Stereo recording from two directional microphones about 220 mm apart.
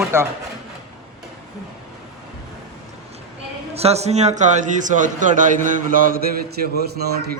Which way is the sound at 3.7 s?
30° right (ahead or behind).